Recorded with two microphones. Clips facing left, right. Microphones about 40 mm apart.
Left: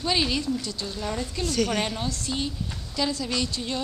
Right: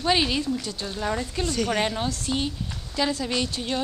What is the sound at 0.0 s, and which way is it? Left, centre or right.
Speech, right.